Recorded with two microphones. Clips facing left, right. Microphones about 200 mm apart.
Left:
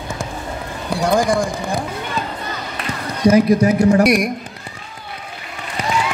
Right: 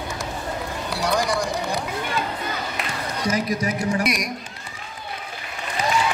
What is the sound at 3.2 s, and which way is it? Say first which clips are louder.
A man's voice: left 12 dB; 60° left (ahead or behind).